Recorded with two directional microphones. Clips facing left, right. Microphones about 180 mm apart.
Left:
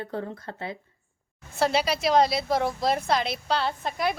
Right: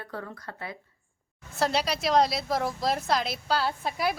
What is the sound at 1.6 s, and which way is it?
A woman's voice, centre (ahead or behind).